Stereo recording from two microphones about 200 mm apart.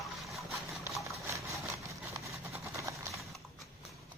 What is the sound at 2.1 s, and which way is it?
Vehicle, 15° right (ahead or behind).